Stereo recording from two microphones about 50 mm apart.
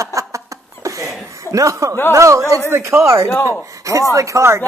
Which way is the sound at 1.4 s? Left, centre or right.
Right.